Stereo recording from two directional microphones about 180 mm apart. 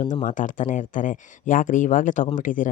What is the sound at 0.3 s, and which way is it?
Speech, 45° left (ahead or behind).